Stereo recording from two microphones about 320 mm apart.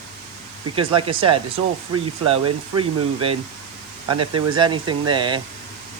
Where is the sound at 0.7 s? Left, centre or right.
Centre.